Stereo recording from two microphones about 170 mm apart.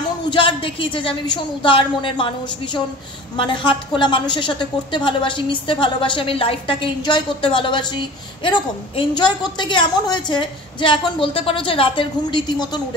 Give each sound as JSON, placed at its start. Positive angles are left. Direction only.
{"t": 0.3, "sound": "a woman's voice", "side_deg": 30}